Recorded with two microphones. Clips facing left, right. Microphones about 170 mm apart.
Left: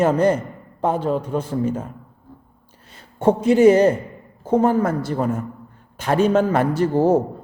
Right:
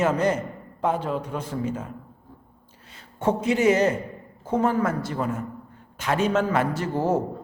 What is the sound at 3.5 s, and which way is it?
A man's voice, 35° left (ahead or behind).